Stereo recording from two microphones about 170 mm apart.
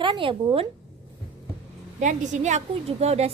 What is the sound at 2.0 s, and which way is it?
A woman's voice, 45° right (ahead or behind).